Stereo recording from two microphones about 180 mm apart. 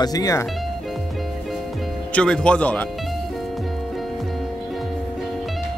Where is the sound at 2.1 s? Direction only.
5° left (ahead or behind).